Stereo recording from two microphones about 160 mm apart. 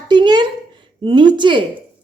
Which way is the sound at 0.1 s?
30° right (ahead or behind).